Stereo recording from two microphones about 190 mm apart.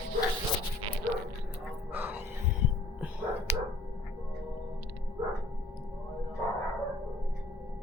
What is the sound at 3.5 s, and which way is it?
Dog, 35° left (ahead or behind).